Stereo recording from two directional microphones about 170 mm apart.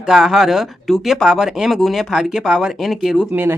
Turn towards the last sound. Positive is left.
turn(degrees=0)  # may be behind; listen again after turning